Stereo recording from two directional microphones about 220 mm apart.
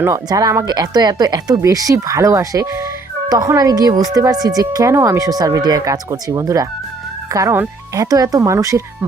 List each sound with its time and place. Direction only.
0.0 s speech: 15° right (ahead or behind)